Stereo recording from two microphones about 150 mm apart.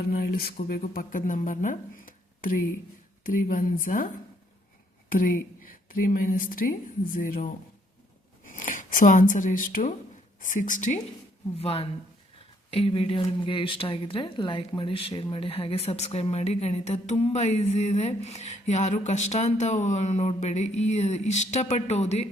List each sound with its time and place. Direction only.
0.1 s speech: 85° left; by 4.1 s 65° left (ahead or behind)
5.1 s speech: 70° left (ahead or behind)
11.5 s speech: 40° left (ahead or behind)